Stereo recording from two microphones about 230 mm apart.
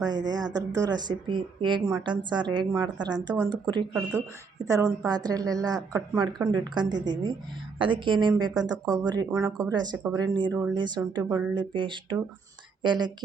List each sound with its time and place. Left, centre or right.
0.0 s a woman's voice: centre